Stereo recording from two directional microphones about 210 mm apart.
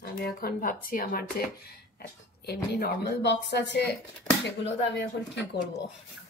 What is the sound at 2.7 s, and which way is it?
Speech, 50° left (ahead or behind).